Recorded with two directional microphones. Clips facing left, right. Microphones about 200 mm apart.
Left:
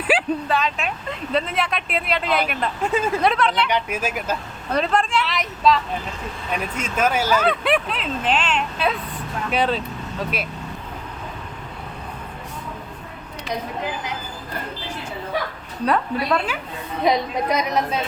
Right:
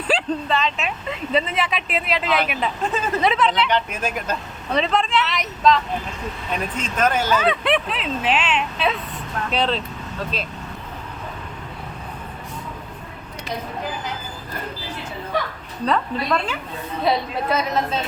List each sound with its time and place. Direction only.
0.1 s speech: 5° left (ahead or behind)
3.7 s a woman's voice: 10° left (ahead or behind)
15.9 s a woman's voice: 10° left (ahead or behind)